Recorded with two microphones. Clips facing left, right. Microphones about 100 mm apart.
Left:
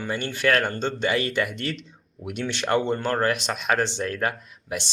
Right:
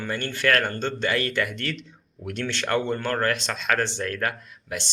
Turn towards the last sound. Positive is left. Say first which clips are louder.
# left 2 dB
turn(degrees=25)  # may be behind; listen again after turning